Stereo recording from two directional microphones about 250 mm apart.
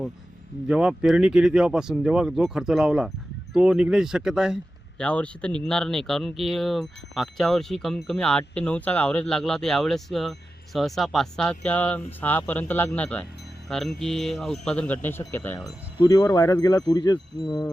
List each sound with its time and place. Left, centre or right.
0.7 s speech: centre